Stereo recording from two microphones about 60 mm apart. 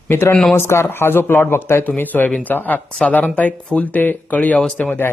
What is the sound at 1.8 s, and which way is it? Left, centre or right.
Speech, left.